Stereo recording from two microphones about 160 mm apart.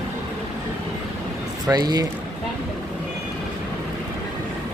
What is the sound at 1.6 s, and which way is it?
Speech, 25° right (ahead or behind).